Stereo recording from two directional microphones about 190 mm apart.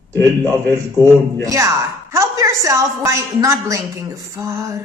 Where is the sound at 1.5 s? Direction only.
15° right (ahead or behind).